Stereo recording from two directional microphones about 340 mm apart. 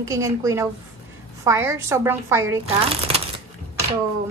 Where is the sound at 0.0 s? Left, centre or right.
Centre.